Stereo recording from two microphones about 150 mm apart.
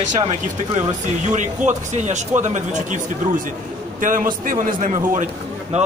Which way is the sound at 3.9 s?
65° right (ahead or behind).